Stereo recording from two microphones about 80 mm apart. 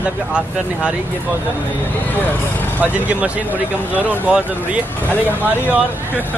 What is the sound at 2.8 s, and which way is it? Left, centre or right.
Speech, centre.